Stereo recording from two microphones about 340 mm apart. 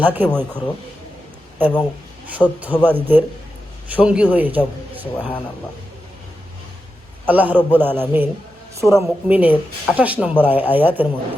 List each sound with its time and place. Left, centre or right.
0.0 s speech: centre
7.3 s speech: centre